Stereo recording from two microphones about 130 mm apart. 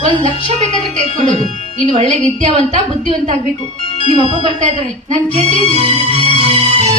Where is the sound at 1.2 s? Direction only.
45° left (ahead or behind).